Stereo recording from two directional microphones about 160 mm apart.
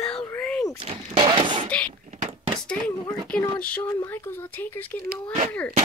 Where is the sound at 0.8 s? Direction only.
35° right (ahead or behind).